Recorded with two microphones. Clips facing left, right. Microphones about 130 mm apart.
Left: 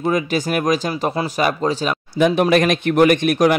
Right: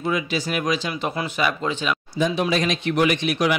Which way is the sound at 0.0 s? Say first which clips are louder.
Left 5 dB; 45° left (ahead or behind).